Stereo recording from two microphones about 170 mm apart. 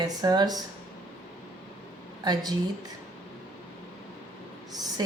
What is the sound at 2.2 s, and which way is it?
Speech, 25° right (ahead or behind).